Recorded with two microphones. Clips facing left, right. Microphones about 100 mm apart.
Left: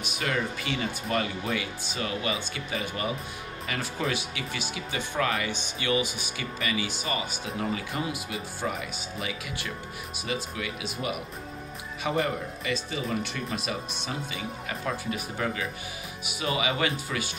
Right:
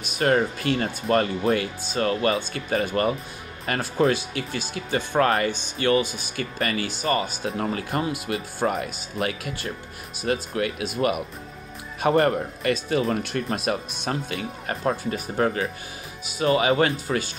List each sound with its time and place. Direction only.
0.2 s speech: 50° right (ahead or behind)
4.0 s speech: 35° right (ahead or behind)
7.9 s speech: 55° right (ahead or behind)
12.0 s speech: 50° right (ahead or behind)
13.0 s speech: 45° right (ahead or behind)